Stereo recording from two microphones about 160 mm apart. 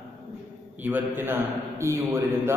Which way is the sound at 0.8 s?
10° right (ahead or behind).